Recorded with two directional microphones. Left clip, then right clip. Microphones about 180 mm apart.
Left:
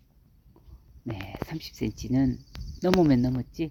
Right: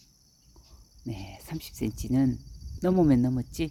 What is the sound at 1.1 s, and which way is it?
Speech, centre (ahead or behind).